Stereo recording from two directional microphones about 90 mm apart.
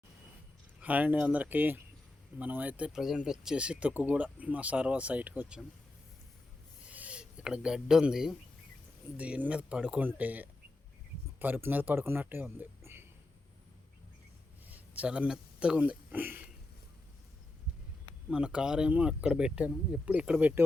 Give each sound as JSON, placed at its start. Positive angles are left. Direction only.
{"t": 0.8, "sound": "speech", "side_deg": -15}
{"t": 6.8, "sound": "a sound", "side_deg": -15}
{"t": 9.1, "sound": "speech", "side_deg": -15}
{"t": 14.7, "sound": "speech", "side_deg": -15}
{"t": 18.3, "sound": "speech", "side_deg": -10}